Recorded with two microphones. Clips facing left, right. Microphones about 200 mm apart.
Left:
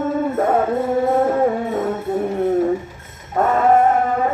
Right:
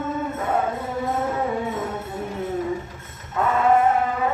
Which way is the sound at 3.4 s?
45° left (ahead or behind).